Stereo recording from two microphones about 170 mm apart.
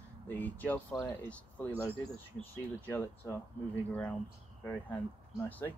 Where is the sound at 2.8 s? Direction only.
10° left (ahead or behind).